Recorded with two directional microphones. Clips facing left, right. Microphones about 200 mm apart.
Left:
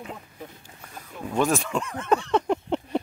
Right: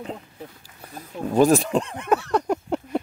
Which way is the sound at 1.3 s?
35° right (ahead or behind).